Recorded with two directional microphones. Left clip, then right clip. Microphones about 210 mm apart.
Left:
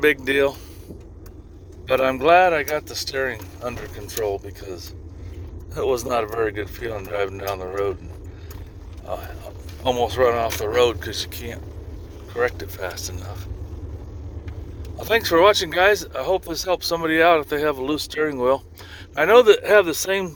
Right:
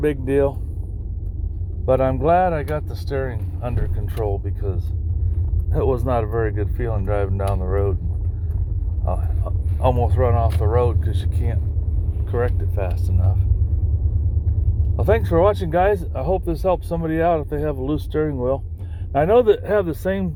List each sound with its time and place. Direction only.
0.0 s speech: 35° left (ahead or behind)
1.9 s speech: 40° left (ahead or behind)
9.8 s speech: 50° left (ahead or behind)
12.4 s speech: 35° left (ahead or behind)
15.3 s speech: 40° left (ahead or behind)